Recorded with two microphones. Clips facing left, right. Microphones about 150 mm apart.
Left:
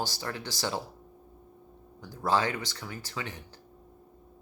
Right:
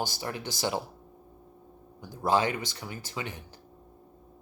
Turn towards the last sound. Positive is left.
turn(degrees=-20)  # may be behind; listen again after turning